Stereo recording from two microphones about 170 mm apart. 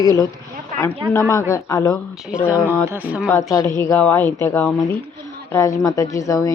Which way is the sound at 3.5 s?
20° left (ahead or behind).